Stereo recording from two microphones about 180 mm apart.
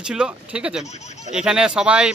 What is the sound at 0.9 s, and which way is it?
Speech, 40° left (ahead or behind).